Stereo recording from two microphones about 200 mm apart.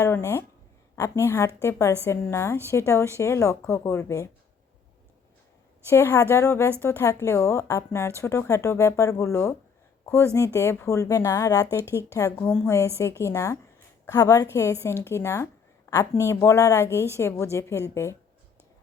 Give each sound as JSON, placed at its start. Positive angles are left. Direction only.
{"t": 0.0, "sound": "speech", "side_deg": 15}
{"t": 5.9, "sound": "speech", "side_deg": 10}